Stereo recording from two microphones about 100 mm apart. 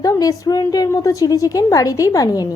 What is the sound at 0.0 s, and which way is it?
Speech, 35° left (ahead or behind).